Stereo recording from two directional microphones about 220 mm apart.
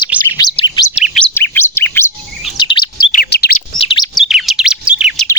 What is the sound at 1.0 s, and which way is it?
Chirp, centre (ahead or behind).